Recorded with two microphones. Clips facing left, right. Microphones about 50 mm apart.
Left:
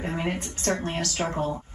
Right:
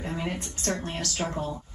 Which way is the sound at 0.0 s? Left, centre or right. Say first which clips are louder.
Left 3 dB; left.